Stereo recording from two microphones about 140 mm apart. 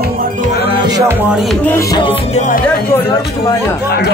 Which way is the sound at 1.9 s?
35° left (ahead or behind).